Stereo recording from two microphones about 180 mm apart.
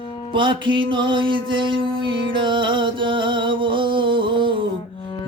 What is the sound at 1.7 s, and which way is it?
Music, 90° right.